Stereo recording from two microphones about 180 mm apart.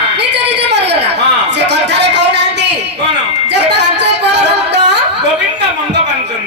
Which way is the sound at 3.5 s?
70° right (ahead or behind).